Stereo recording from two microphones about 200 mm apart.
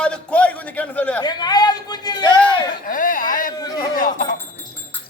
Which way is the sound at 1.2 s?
20° left (ahead or behind).